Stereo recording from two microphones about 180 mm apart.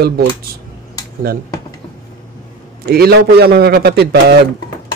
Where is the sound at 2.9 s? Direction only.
60° right (ahead or behind).